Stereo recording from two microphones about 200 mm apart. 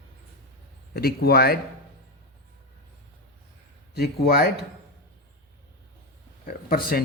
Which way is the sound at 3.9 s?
50° left (ahead or behind).